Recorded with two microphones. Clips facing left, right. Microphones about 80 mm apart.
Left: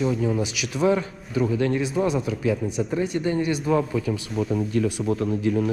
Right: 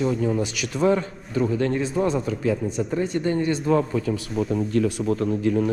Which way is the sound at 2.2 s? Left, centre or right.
Right.